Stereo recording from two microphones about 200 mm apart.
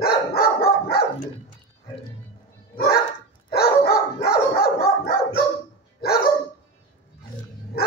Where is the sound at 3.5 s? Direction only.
50° left (ahead or behind).